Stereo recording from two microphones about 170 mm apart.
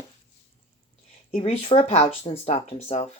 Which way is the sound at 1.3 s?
35° left (ahead or behind).